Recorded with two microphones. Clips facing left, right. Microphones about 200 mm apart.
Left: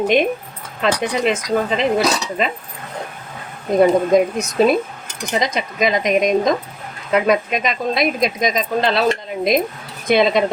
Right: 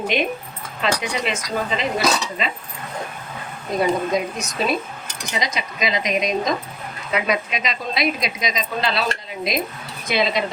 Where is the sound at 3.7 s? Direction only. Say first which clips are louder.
Left 7 dB; 50° left (ahead or behind).